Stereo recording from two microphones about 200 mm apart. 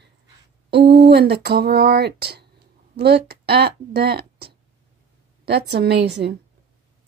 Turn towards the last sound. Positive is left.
turn(degrees=-60)  # may be behind; listen again after turning